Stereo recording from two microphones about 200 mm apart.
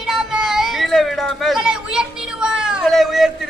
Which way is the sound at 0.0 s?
Centre (ahead or behind).